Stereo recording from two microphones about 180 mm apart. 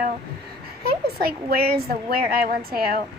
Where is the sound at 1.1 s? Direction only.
60° right (ahead or behind).